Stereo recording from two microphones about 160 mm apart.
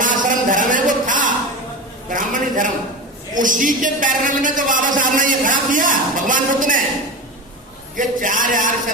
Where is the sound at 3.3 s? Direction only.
55° right (ahead or behind).